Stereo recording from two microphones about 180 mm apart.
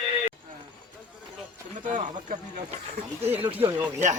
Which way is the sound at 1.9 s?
45° right (ahead or behind).